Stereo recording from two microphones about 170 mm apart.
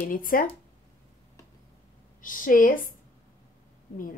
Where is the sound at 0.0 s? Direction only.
55° left (ahead or behind).